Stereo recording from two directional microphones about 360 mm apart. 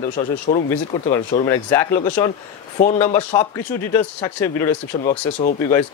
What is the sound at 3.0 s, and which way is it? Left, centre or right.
Speech, centre.